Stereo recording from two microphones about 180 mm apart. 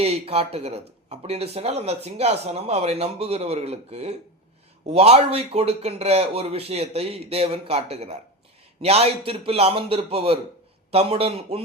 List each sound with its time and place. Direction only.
0.0 s speech: 35° right (ahead or behind)